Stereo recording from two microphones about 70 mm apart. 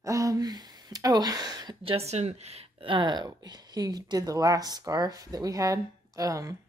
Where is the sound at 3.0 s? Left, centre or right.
Right.